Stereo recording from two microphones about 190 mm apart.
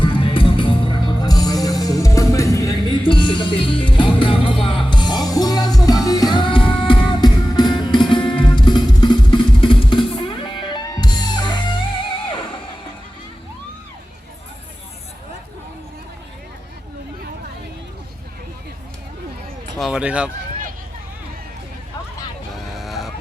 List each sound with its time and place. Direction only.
0.0 s music: 25° left (ahead or behind)
19.8 s music: 5° right (ahead or behind)
22.5 s vehicle: centre (ahead or behind)